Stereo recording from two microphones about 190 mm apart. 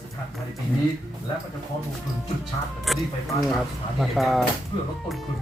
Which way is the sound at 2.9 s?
Centre (ahead or behind).